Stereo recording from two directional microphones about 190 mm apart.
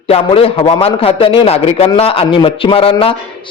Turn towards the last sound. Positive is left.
turn(degrees=30)  # may be behind; listen again after turning